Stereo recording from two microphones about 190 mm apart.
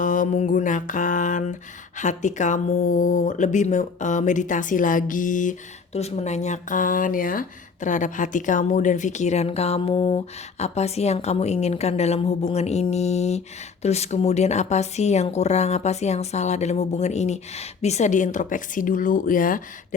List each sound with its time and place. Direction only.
0.0 s mantra: 45° left (ahead or behind)
2.0 s speech: 40° left (ahead or behind)